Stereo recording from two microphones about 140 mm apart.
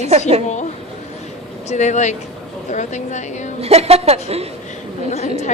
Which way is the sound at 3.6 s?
50° right (ahead or behind).